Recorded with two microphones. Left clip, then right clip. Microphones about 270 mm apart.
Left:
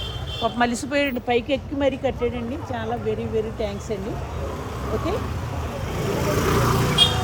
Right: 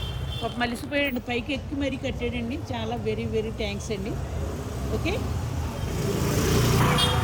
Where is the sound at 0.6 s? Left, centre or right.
Left.